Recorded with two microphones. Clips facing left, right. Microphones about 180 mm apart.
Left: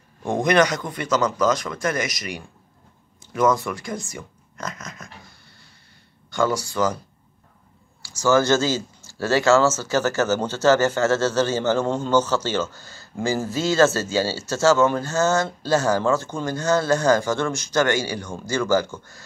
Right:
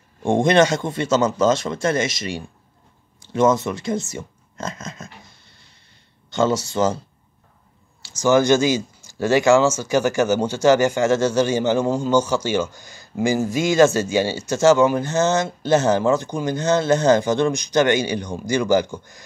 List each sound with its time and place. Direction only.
0.2 s speech: 25° right (ahead or behind)
6.3 s speech: 25° right (ahead or behind)
8.0 s speech: 20° right (ahead or behind)